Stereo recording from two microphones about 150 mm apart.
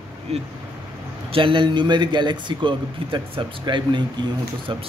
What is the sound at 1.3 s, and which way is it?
A man's voice, 35° right (ahead or behind).